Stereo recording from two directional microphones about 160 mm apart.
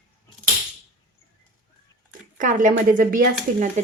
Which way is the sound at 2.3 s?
55° right (ahead or behind).